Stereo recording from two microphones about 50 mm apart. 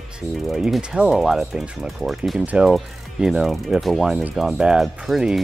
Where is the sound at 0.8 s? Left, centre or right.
Centre.